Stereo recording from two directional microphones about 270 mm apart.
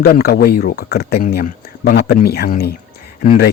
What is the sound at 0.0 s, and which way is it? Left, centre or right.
A man's voice, left.